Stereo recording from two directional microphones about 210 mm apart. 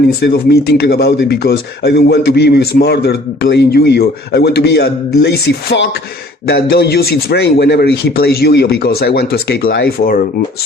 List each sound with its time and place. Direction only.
0.2 s speech: 50° left (ahead or behind)